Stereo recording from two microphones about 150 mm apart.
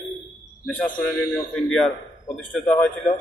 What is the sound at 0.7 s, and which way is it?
A man's voice, 10° left (ahead or behind).